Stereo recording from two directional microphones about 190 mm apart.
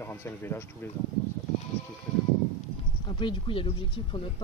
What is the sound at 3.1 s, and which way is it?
Speech, 25° left (ahead or behind).